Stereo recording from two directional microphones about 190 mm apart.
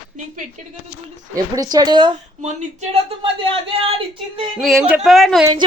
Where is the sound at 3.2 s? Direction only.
30° right (ahead or behind).